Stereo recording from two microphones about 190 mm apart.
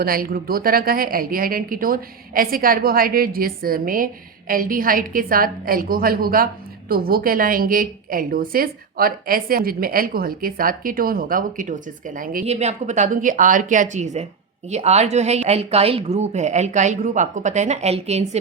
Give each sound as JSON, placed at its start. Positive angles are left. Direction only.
{"t": 0.0, "sound": "a woman's voice", "side_deg": -50}
{"t": 12.5, "sound": "a woman's voice", "side_deg": -35}